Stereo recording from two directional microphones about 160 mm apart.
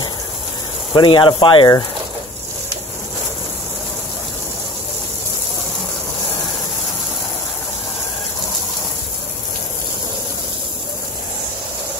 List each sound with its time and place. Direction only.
0.9 s speech: 30° left (ahead or behind)